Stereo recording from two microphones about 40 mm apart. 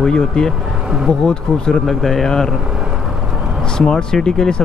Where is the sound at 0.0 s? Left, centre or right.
Centre.